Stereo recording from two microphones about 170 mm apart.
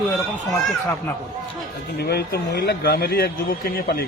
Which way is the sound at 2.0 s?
70° left (ahead or behind).